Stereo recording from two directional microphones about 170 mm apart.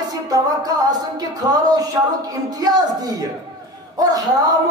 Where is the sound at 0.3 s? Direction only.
20° right (ahead or behind).